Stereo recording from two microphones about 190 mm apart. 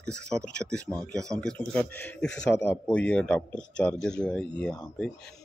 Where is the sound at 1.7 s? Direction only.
5° left (ahead or behind).